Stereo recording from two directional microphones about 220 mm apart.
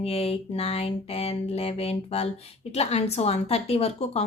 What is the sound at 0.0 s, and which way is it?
A woman's voice, 30° left (ahead or behind).